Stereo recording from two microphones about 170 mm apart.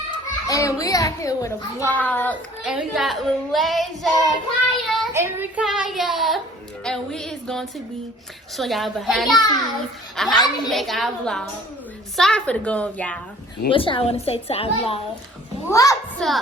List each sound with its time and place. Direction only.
0.1 s a child's voice: 20° left (ahead or behind)
2.6 s a woman's voice: 5° right (ahead or behind)
13.7 s a woman's voice: 30° left (ahead or behind)
15.7 s a child's voice: 20° left (ahead or behind)
16.2 s a woman's voice: 5° left (ahead or behind)